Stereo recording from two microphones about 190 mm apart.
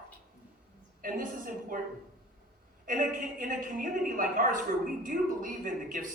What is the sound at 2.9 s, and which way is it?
A man's voice, 45° right (ahead or behind).